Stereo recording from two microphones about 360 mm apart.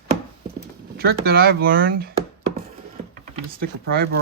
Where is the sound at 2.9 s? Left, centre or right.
Right.